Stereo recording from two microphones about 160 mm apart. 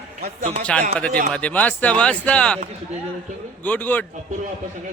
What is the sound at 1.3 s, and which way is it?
Speech, 10° left (ahead or behind).